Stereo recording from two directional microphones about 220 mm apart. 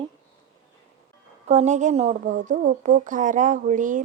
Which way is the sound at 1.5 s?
30° right (ahead or behind).